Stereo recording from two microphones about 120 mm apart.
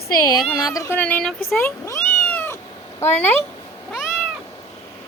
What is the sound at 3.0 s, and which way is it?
Speech, 20° left (ahead or behind).